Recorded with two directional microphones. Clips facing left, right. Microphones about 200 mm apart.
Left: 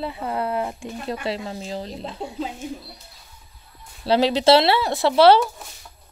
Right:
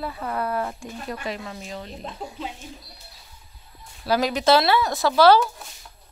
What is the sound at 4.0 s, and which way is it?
Speech, 30° left (ahead or behind).